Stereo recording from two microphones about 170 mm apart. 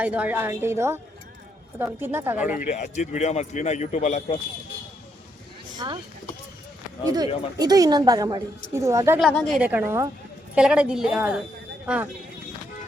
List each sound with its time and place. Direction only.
0.0 s a woman's voice: 10° right (ahead or behind)
2.4 s speech: 50° left (ahead or behind)
5.7 s speech: 25° right (ahead or behind)
7.0 s a woman's voice: 20° right (ahead or behind)
9.1 s a woman's voice: 5° left (ahead or behind)
9.6 s a woman's voice: 10° right (ahead or behind)